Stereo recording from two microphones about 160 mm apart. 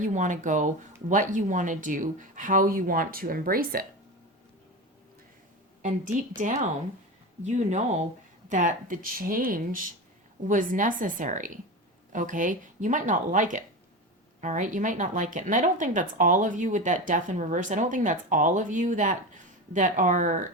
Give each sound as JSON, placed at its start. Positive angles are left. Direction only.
{"t": 0.0, "sound": "speech", "side_deg": -50}
{"t": 6.3, "sound": "speech", "side_deg": -50}